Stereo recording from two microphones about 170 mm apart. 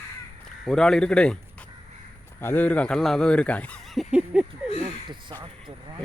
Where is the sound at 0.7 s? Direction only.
5° left (ahead or behind).